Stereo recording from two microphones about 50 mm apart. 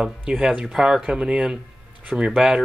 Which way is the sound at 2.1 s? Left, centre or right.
Centre.